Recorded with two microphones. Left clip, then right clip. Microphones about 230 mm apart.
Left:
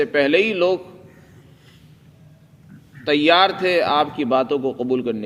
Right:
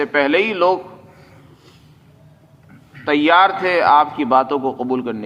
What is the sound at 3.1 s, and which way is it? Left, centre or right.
A man's voice, left.